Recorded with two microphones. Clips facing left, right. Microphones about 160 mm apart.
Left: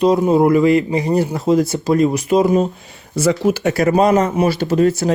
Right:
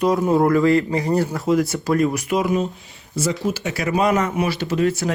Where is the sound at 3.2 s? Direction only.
70° left (ahead or behind); by 5.1 s 40° left (ahead or behind).